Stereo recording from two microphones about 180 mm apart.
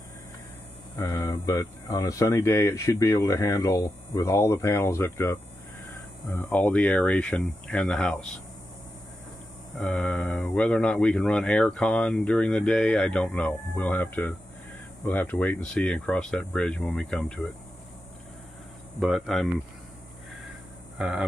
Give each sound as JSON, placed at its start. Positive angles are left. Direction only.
{"t": 0.9, "sound": "speech", "side_deg": 15}
{"t": 9.8, "sound": "speech", "side_deg": 10}
{"t": 18.9, "sound": "speech", "side_deg": 0}